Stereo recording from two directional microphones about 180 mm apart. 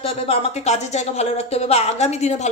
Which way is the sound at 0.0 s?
35° left (ahead or behind).